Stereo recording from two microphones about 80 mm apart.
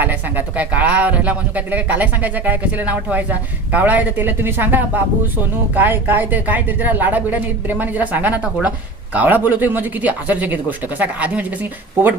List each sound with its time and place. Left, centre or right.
0.0 s speech: right